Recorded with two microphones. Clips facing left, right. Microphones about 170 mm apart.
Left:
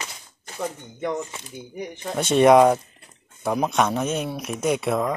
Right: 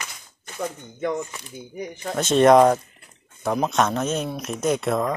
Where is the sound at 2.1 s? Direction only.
10° left (ahead or behind).